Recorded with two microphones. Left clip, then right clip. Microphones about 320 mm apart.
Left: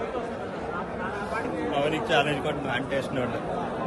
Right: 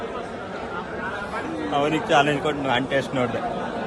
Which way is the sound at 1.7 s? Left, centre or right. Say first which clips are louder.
Right 5 dB; centre.